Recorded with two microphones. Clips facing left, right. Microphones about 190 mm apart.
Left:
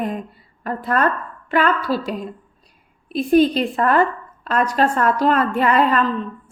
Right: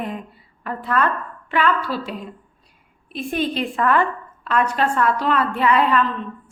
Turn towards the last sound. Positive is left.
turn(degrees=40)  # may be behind; listen again after turning